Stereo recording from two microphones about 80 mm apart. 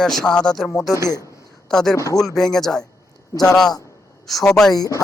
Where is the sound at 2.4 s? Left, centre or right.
Centre.